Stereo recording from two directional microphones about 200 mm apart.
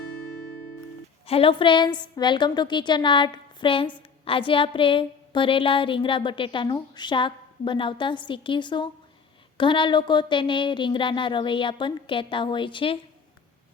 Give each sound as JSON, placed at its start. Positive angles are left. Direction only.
{"t": 1.3, "sound": "a woman's voice", "side_deg": 25}